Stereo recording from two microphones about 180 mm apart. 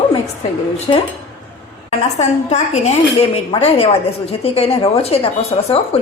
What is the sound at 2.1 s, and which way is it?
Speech, 40° left (ahead or behind).